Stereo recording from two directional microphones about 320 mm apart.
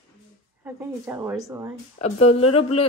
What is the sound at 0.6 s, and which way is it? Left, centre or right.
A woman's voice, centre.